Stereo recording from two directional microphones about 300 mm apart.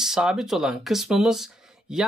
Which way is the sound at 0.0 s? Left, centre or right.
Centre.